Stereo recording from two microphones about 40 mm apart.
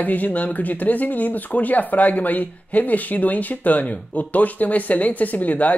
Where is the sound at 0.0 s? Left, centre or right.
Left.